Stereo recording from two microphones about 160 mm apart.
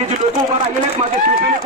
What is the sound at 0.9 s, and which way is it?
Speech, 60° right (ahead or behind).